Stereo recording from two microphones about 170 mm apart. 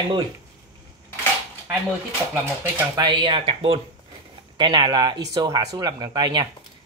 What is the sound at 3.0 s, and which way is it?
Speech, 30° right (ahead or behind).